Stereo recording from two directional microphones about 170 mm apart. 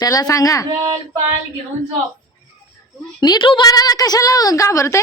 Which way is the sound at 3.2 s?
25° left (ahead or behind).